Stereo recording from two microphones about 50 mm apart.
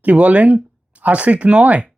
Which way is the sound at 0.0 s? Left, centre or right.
Right.